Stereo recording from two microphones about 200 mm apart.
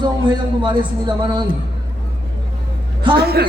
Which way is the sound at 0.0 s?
25° right (ahead or behind).